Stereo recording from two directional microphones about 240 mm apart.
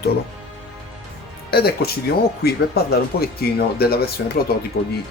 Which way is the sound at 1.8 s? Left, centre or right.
Left.